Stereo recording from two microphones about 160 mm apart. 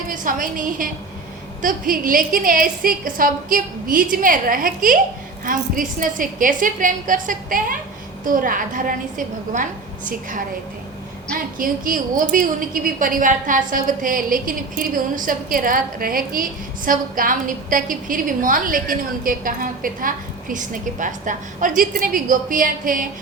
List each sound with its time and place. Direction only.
0.1 s a woman's voice: 55° right (ahead or behind)
11.5 s a woman's voice: 60° right (ahead or behind)